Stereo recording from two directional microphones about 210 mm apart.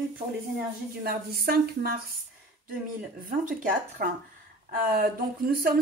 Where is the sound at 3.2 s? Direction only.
40° right (ahead or behind).